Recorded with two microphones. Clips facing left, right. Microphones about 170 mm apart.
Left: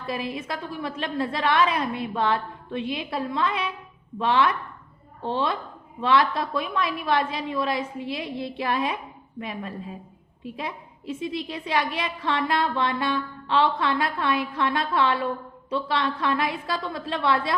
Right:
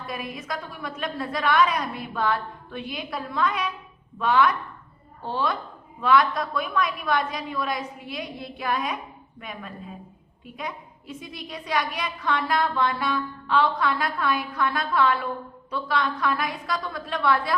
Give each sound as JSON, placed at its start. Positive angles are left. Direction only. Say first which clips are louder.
{"t": 0.1, "sound": "a woman's voice", "louder": "left 4 dB", "side_deg": 30}